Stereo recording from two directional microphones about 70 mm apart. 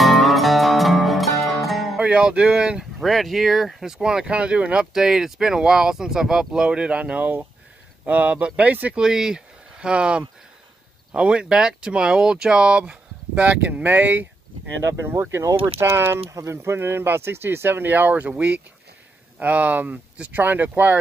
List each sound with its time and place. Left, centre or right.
0.0 s music: centre
2.0 s speech: centre
3.0 s speech: centre; by 14.2 s right
15.0 s speech: right
16.3 s speech: right